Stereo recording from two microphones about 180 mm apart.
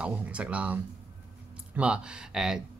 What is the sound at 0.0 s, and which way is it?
Speech, 5° right (ahead or behind).